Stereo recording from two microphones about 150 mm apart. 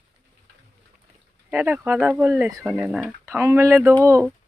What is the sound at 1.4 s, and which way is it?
Speech, 10° right (ahead or behind).